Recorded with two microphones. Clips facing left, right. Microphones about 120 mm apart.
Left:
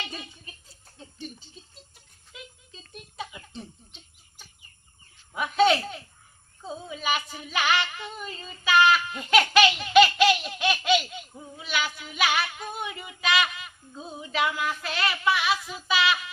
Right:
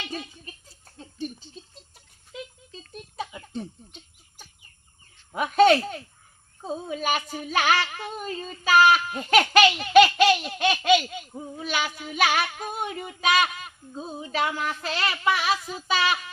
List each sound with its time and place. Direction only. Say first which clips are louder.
2.9 s music: right 3 dB; 35° right (ahead or behind)
5.3 s a sound: right 4 dB; 45° right (ahead or behind)
6.6 s female singing: right 6 dB; 45° right (ahead or behind)
11.5 s child singing: right 1 dB; 45° right (ahead or behind)